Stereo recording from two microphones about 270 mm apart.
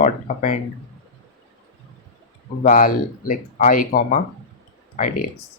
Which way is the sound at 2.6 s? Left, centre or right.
Left.